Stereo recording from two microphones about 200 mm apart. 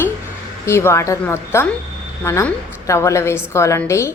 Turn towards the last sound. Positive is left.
turn(degrees=15)  # may be behind; listen again after turning